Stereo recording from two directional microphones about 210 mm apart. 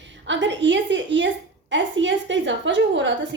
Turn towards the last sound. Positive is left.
turn(degrees=-60)  # may be behind; listen again after turning